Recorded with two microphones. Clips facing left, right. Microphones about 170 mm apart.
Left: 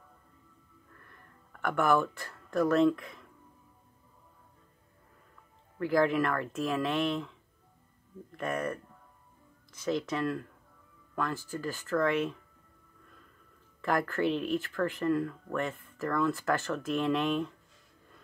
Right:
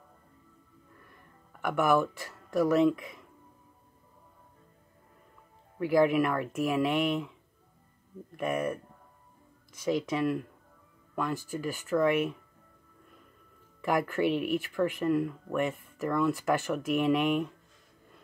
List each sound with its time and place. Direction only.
0.9 s a sound: 10° right (ahead or behind)
5.8 s speech: 15° right (ahead or behind)
8.4 s speech: 10° right (ahead or behind)
9.8 s speech: 15° right (ahead or behind)
13.7 s speech: 15° right (ahead or behind)